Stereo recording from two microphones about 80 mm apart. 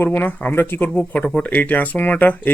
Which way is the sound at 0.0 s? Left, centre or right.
Left.